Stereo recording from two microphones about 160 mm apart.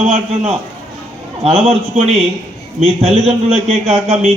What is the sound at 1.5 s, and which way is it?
A man's voice, 40° right (ahead or behind).